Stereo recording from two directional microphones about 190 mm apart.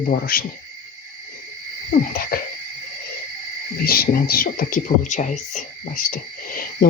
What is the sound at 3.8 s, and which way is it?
Speech, 50° left (ahead or behind).